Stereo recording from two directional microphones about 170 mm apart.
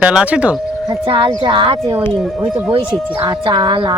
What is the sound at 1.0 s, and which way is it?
Speech, 30° right (ahead or behind).